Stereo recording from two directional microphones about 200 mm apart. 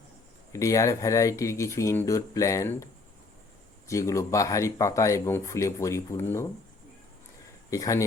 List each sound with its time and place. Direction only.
0.5 s speech: 15° left (ahead or behind)
7.7 s speech: 15° left (ahead or behind)